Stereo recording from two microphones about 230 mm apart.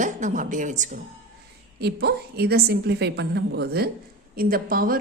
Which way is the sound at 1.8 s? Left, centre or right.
Right.